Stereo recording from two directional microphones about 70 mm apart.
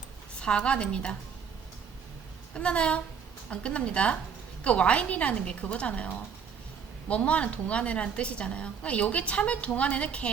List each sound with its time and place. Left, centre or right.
0.3 s a woman's voice: centre
2.6 s a woman's voice: centre